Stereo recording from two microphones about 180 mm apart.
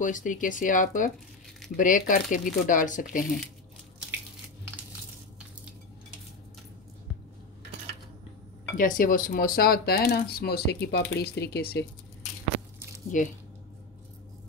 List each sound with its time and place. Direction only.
0.0 s speech: 45° left (ahead or behind)
8.7 s speech: 50° left (ahead or behind)
13.1 s speech: 45° left (ahead or behind)